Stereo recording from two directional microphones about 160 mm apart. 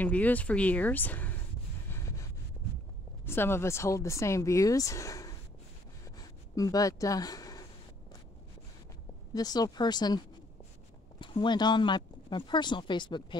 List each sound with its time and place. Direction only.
0.0 s speech: 10° left (ahead or behind)
1.9 s wind noise: 15° left (ahead or behind)
3.3 s speech: 15° left (ahead or behind)
6.1 s a sound: 20° left (ahead or behind)
9.3 s speech: 25° left (ahead or behind)